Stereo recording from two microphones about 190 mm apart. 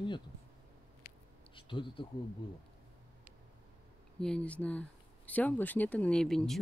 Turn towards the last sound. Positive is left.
turn(degrees=5)  # may be behind; listen again after turning